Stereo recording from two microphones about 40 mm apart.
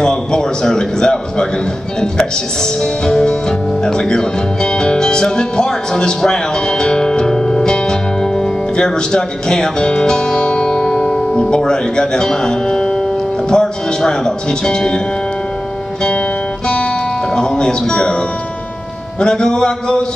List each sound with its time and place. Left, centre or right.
0.0 s speech: centre
2.8 s speech: centre
10.8 s music: centre
11.3 s speech: left
17.4 s speech: centre
19.1 s speech: centre